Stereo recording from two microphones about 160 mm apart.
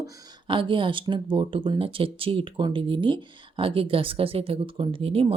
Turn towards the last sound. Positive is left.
turn(degrees=-35)  # may be behind; listen again after turning